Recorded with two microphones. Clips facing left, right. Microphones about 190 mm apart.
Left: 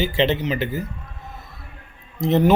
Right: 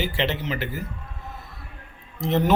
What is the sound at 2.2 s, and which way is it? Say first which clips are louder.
Speech: left 5 dB; 15° left (ahead or behind).